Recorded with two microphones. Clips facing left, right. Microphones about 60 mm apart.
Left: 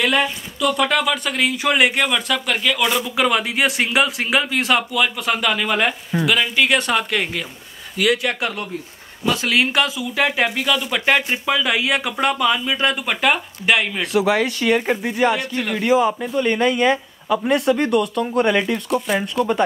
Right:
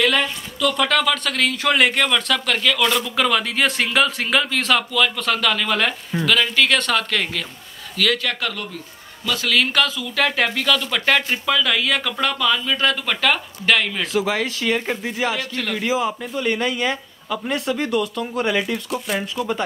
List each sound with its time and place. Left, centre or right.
0.0 s speech: centre
15.9 s speech: centre